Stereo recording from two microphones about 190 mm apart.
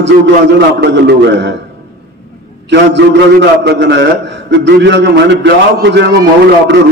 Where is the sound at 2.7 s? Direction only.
65° right (ahead or behind).